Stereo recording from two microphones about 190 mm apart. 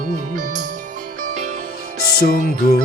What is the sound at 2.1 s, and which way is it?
Music, 55° left (ahead or behind).